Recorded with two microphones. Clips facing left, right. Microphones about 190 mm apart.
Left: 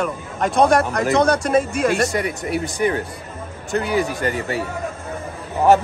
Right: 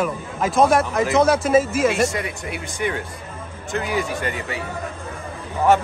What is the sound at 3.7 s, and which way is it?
Speech, 35° left (ahead or behind).